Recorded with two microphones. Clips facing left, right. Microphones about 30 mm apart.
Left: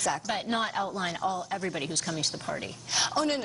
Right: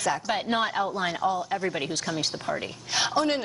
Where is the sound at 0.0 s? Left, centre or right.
Centre.